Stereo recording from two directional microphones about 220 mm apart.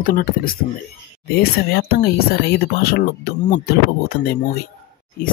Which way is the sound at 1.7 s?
45° left (ahead or behind).